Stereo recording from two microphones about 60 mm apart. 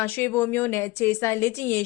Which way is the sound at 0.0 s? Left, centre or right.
Left.